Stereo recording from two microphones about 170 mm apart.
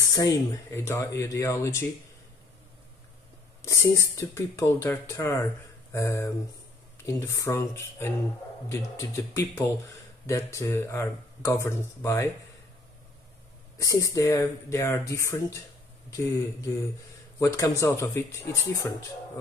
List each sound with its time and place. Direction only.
0.1 s speech: 20° left (ahead or behind)
3.6 s speech: 15° left (ahead or behind)
13.7 s speech: 20° left (ahead or behind)